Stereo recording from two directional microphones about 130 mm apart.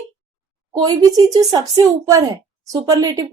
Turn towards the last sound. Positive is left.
turn(degrees=-30)  # may be behind; listen again after turning